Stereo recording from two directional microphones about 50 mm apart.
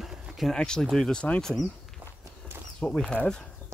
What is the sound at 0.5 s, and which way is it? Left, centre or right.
Speech, centre.